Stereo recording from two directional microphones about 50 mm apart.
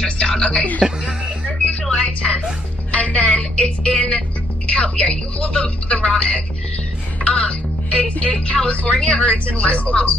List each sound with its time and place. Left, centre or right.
0.0 s speech: centre
0.8 s speech: centre
1.4 s music: left
2.0 s speech: centre